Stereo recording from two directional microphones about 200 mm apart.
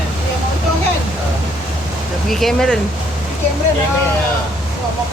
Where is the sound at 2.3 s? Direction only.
Centre (ahead or behind).